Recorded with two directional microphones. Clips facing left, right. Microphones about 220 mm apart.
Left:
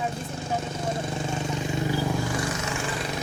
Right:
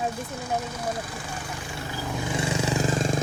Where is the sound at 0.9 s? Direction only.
25° left (ahead or behind).